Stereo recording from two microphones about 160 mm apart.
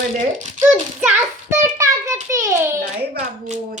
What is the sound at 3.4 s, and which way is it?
Speech, 50° right (ahead or behind).